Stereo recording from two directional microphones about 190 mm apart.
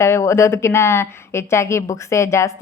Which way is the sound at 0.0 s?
15° left (ahead or behind).